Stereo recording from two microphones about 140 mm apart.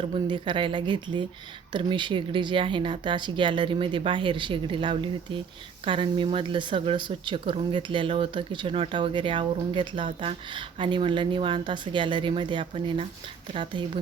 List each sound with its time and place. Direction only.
0.0 s speech: 40° right (ahead or behind)